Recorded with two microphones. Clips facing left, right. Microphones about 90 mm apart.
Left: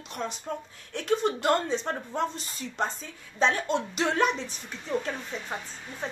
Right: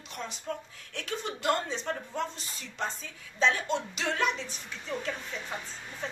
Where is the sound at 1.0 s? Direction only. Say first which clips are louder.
Left 7 dB; 50° left (ahead or behind).